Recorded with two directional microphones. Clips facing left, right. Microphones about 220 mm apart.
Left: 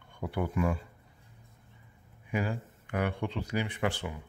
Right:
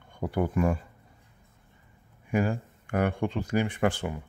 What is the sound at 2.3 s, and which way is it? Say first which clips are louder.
Speech: right 6 dB; 45° right (ahead or behind).